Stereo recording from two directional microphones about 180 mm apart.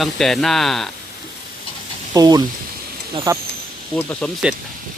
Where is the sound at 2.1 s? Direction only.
20° right (ahead or behind).